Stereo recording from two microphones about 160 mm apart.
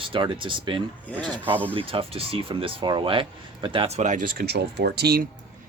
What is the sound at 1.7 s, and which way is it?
Speech, 35° right (ahead or behind).